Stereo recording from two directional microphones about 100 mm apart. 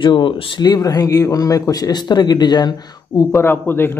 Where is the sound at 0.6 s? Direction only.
40° left (ahead or behind).